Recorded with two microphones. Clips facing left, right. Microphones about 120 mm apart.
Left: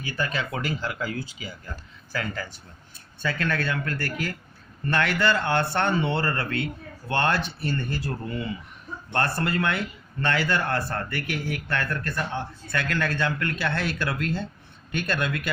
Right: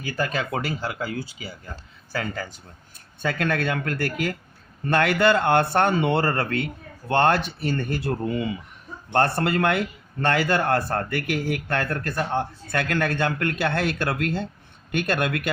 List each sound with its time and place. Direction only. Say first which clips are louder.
0.0 s speech: right 3 dB; 40° right (ahead or behind)
3.2 s speech: right 3 dB; 50° right (ahead or behind)
9.1 s speech: right 5 dB; 45° right (ahead or behind)
9.4 s speech: right 4 dB; 55° right (ahead or behind)